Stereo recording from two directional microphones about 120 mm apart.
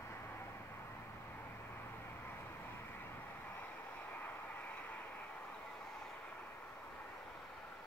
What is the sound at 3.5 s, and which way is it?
Vehicle, 15° left (ahead or behind).